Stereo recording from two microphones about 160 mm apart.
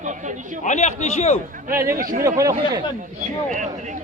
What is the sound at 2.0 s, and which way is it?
Speech, 55° right (ahead or behind).